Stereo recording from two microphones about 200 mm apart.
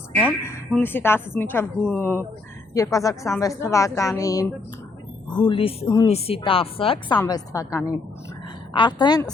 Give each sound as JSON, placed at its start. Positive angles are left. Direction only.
{"t": 0.2, "sound": "a woman's voice", "side_deg": 5}